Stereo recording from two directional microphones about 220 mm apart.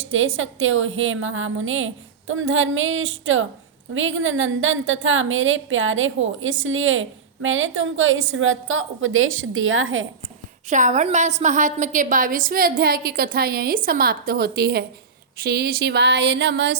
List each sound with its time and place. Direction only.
0.1 s a woman's voice: 65° right (ahead or behind)
10.7 s a woman's voice: 35° right (ahead or behind)
15.4 s a sound: 45° right (ahead or behind)